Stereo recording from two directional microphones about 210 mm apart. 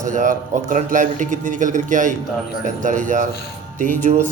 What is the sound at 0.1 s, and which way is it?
Speech, 35° right (ahead or behind).